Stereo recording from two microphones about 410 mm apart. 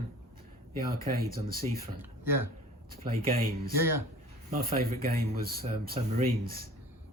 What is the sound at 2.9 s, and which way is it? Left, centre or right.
Speech, right.